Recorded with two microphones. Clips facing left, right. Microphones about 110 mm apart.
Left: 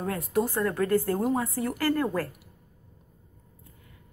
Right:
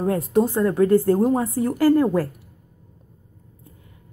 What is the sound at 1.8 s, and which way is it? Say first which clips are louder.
Speech: right 10 dB; 15° right (ahead or behind).